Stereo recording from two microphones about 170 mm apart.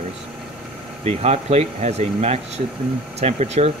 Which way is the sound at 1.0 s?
40° right (ahead or behind).